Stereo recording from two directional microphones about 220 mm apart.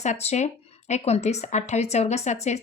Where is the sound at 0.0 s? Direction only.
30° left (ahead or behind).